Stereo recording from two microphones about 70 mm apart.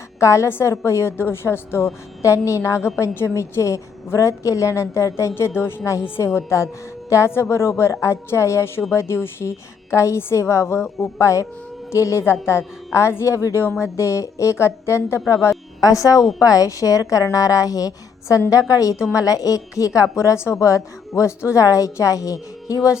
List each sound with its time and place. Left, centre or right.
0.2 s a woman's voice: left
15.8 s a woman's voice: left